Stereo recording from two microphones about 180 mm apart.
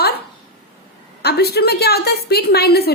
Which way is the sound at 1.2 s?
65° left (ahead or behind).